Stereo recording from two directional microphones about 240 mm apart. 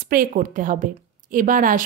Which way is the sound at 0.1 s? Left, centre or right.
Right.